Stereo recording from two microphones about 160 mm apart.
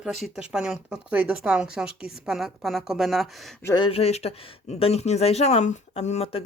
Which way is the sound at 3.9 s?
40° left (ahead or behind).